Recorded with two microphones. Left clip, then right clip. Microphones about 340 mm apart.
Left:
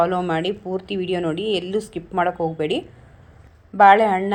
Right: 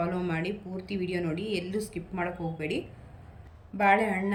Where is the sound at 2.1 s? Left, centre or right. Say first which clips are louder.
Left 13 dB; left.